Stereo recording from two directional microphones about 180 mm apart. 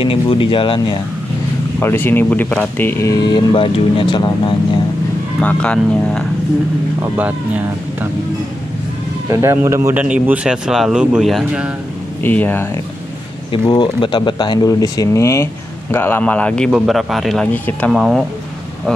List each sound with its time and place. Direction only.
0.0 s speech: 30° left (ahead or behind)
1.8 s speech: 10° left (ahead or behind)
5.4 s speech: 5° left (ahead or behind)
7.2 s speech: 10° right (ahead or behind)
9.3 s speech: 15° right (ahead or behind)
12.2 s speech: 10° left (ahead or behind)
13.5 s speech: 25° left (ahead or behind); by 18.2 s centre (ahead or behind)